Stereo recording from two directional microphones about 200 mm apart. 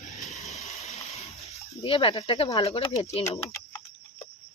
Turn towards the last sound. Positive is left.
turn(degrees=15)  # may be behind; listen again after turning